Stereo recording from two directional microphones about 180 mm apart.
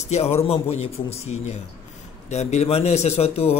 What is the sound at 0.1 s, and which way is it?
A man's voice, 35° left (ahead or behind).